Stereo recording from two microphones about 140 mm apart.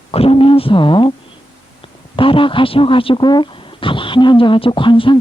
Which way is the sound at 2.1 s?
40° left (ahead or behind).